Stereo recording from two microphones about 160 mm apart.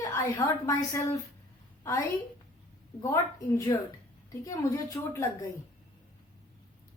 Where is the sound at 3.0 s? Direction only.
20° left (ahead or behind).